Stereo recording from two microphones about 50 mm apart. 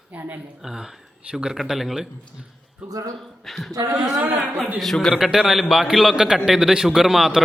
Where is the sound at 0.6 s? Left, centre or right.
Centre.